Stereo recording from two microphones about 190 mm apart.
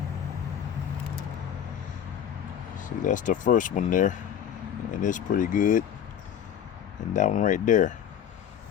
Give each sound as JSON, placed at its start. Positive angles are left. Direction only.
{"t": 2.7, "sound": "speech", "side_deg": 45}
{"t": 7.1, "sound": "speech", "side_deg": 40}